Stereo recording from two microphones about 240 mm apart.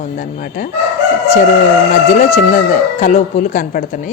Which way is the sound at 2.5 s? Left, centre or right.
Left.